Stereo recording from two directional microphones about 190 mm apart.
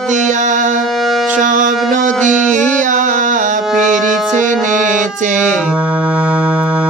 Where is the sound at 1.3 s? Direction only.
40° right (ahead or behind).